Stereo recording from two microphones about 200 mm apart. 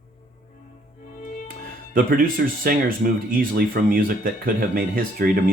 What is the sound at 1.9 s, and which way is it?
Speech, 45° right (ahead or behind).